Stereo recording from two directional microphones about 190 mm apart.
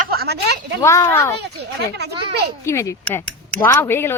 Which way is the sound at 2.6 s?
15° left (ahead or behind).